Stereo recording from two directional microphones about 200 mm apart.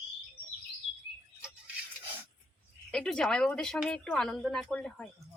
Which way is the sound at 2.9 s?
5° left (ahead or behind).